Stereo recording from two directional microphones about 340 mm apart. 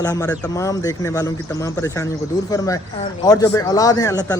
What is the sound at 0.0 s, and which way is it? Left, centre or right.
Speech, centre.